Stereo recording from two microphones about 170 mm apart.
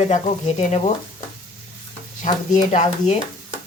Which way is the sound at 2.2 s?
45° left (ahead or behind).